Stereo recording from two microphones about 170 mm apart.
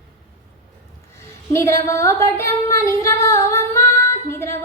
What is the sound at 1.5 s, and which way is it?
Speech, 15° left (ahead or behind).